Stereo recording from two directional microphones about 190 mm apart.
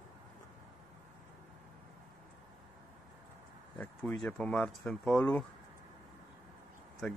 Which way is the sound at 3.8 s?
5° left (ahead or behind).